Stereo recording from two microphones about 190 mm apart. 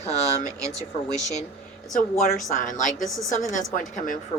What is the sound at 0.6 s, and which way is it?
Speech, 20° right (ahead or behind).